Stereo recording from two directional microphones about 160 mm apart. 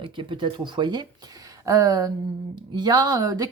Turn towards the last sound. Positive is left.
turn(degrees=-25)  # may be behind; listen again after turning